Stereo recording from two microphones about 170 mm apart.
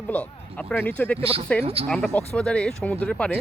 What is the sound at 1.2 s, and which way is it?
Speech, 35° right (ahead or behind).